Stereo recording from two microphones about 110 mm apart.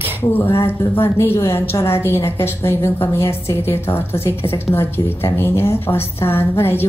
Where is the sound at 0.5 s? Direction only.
25° left (ahead or behind).